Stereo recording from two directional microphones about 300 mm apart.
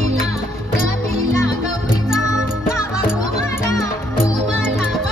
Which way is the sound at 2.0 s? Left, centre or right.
Centre.